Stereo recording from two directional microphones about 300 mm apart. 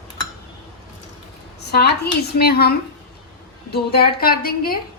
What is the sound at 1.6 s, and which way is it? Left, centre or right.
A woman's voice, left.